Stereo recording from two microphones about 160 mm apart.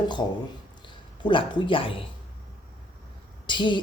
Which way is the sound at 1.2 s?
30° left (ahead or behind).